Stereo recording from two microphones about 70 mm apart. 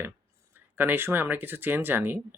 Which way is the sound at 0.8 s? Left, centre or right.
Right.